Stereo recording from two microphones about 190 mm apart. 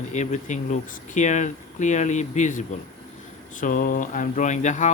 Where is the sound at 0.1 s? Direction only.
40° left (ahead or behind).